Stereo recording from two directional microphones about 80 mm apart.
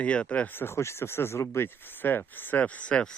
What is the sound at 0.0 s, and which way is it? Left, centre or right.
Speech, centre.